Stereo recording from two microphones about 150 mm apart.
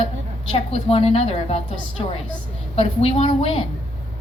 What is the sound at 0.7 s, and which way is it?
Speech, 40° left (ahead or behind).